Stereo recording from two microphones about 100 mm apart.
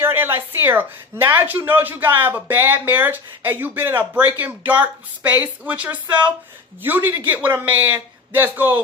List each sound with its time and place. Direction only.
0.0 s a man's voice: 25° right (ahead or behind)